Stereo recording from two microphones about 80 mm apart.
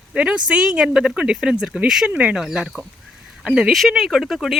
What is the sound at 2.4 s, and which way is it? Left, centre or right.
Speech, centre.